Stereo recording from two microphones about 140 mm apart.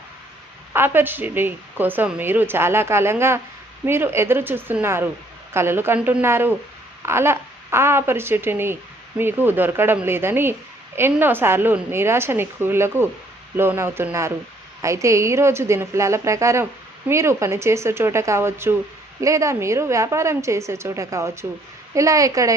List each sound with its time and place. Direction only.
0.7 s a woman's voice: 15° right (ahead or behind)